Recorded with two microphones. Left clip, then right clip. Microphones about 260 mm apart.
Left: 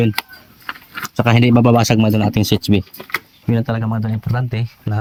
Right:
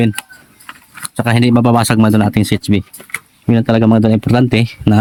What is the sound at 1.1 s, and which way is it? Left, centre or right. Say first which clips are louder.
Speech: right 1 dB; centre.